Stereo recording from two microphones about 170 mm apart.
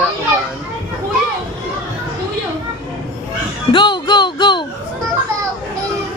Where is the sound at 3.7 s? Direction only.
25° left (ahead or behind).